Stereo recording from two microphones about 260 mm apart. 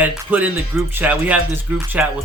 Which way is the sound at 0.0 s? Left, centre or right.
Centre.